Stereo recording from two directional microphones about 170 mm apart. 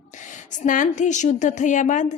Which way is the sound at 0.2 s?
45° left (ahead or behind).